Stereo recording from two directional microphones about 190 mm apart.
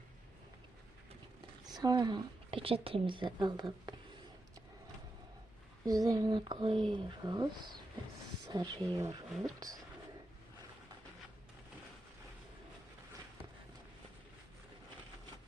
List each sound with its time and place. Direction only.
1.7 s speech: 20° right (ahead or behind)
5.8 s speech: 20° right (ahead or behind)